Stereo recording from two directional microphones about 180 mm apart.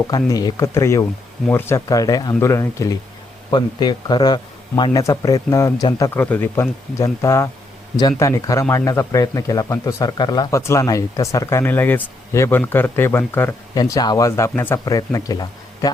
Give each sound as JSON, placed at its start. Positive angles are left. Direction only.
{"t": 0.1, "sound": "speech", "side_deg": 20}